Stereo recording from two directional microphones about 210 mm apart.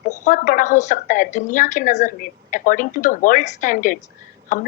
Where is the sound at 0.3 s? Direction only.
40° left (ahead or behind).